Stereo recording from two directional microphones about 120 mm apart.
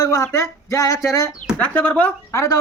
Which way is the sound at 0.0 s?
25° left (ahead or behind).